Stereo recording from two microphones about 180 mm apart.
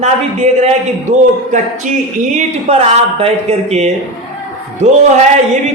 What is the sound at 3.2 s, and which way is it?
Speech, 35° right (ahead or behind).